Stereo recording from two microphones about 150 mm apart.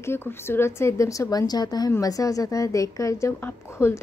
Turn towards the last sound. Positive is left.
turn(degrees=15)  # may be behind; listen again after turning